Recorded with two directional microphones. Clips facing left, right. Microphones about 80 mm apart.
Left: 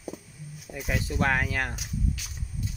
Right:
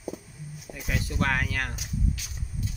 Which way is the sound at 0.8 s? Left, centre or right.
Centre.